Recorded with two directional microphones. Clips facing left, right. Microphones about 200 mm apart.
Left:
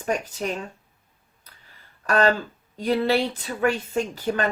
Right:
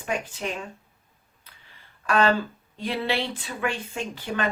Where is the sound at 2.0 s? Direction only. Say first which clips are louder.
Left 1 dB; 40° left (ahead or behind).